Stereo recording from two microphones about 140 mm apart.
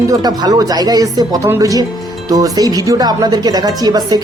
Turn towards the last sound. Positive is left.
turn(degrees=-30)  # may be behind; listen again after turning